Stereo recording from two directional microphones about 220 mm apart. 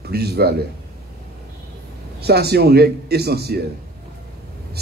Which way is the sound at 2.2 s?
45° right (ahead or behind).